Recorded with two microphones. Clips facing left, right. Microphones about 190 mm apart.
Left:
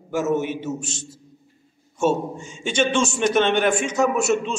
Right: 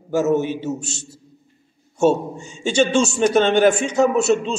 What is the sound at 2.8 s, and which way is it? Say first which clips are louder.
A man's voice: right 4 dB; 35° right (ahead or behind).